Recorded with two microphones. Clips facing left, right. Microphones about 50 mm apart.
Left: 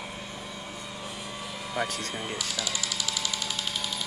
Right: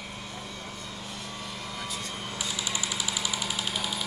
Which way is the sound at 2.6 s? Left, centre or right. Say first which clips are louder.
Even; right.